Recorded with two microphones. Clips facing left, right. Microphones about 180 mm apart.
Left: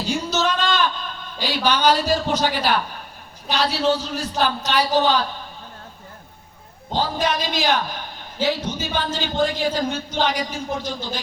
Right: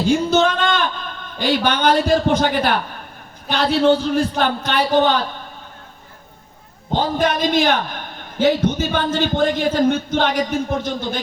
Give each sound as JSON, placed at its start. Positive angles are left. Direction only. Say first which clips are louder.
{"t": 0.0, "sound": "a sound", "louder": "right 7 dB", "side_deg": -50}
{"t": 1.4, "sound": "a man's voice", "louder": "right 3 dB", "side_deg": -55}
{"t": 6.9, "sound": "a man's voice", "louder": "right 4 dB", "side_deg": -55}